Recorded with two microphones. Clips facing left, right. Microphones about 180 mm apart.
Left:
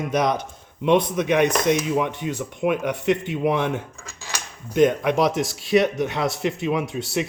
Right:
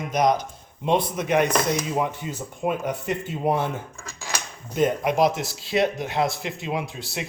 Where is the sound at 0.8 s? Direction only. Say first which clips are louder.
Left 4 dB; 75° left (ahead or behind).